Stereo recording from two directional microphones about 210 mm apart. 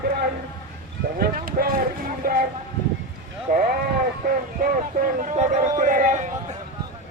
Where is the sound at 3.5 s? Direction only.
45° right (ahead or behind).